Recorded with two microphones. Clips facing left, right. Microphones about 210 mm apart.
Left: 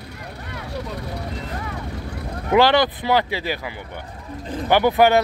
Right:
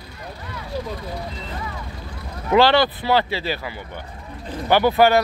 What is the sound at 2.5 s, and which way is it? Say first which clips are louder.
Speech: even; 15° left (ahead or behind).